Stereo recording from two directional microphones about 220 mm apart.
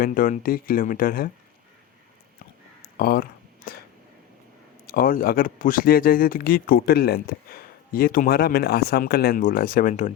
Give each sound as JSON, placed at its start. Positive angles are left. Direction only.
{"t": 0.0, "sound": "speech", "side_deg": 40}
{"t": 2.8, "sound": "a sound", "side_deg": 40}
{"t": 4.9, "sound": "speech", "side_deg": 40}